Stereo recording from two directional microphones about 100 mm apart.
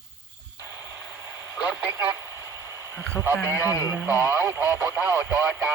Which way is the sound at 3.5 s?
20° right (ahead or behind).